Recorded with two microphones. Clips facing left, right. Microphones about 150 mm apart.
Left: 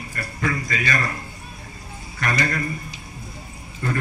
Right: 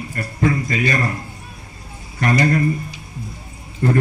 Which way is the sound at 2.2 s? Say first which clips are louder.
Right 7 dB; 25° right (ahead or behind).